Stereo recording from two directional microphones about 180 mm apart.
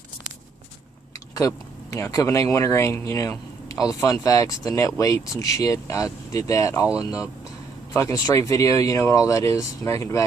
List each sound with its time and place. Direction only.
1.4 s speech: 15° left (ahead or behind)